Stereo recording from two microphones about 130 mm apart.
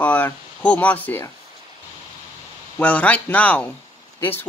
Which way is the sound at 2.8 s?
10° left (ahead or behind).